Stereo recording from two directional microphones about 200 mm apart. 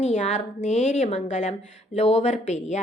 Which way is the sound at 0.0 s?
35° left (ahead or behind).